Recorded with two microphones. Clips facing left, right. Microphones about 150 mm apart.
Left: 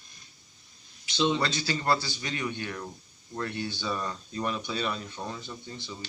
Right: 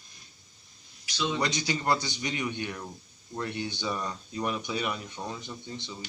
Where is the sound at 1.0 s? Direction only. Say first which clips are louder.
Left 5 dB; 25° left (ahead or behind).